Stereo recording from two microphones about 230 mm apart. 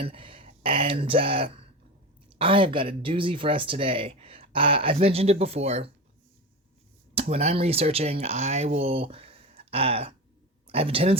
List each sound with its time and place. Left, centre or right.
0.0 s speech: right
7.1 s speech: right